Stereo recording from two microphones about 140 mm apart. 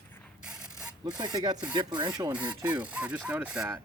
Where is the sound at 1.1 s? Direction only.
30° right (ahead or behind).